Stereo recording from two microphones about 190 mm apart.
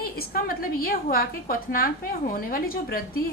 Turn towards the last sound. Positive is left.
turn(degrees=50)  # may be behind; listen again after turning